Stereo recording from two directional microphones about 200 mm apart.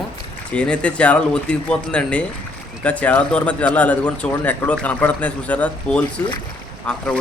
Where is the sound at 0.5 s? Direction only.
5° left (ahead or behind).